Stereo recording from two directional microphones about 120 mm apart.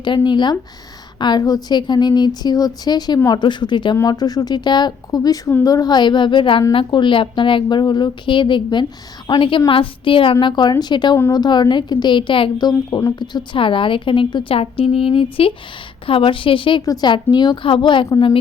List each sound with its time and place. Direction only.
0.0 s a woman's voice: 40° left (ahead or behind)
16.8 s a woman's voice: 35° left (ahead or behind)